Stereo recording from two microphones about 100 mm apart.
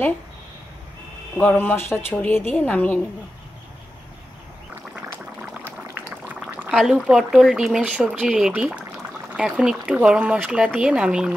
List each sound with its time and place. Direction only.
1.3 s speech: 15° left (ahead or behind)
4.9 s boiling: 15° right (ahead or behind)
5.9 s a sound: 15° right (ahead or behind)
6.7 s speech: 5° right (ahead or behind)